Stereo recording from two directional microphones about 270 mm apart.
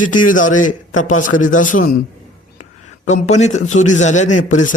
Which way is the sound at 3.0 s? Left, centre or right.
Left.